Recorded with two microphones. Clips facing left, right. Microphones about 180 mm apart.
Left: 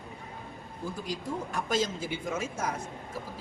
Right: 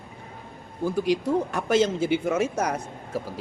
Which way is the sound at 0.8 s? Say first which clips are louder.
Right 12 dB; 80° right.